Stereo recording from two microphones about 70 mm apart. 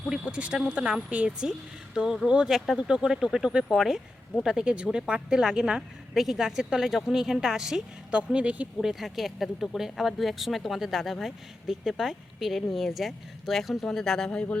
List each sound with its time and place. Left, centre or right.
0.1 s a woman's voice: centre